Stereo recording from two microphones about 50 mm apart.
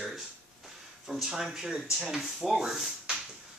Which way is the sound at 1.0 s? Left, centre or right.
Centre.